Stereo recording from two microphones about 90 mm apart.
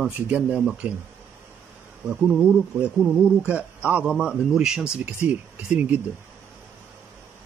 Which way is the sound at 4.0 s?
10° right (ahead or behind).